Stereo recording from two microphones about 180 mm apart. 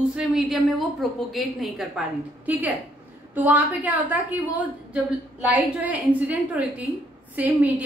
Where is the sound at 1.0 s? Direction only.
Centre (ahead or behind).